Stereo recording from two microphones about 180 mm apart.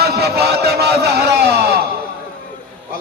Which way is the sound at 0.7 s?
65° right (ahead or behind).